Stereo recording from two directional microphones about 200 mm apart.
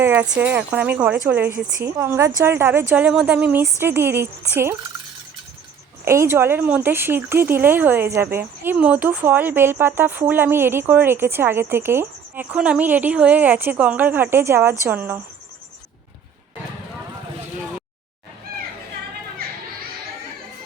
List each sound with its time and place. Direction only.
0.0 s speech: 10° right (ahead or behind)
6.1 s speech: 15° right (ahead or behind)
19.4 s children playing: 50° right (ahead or behind)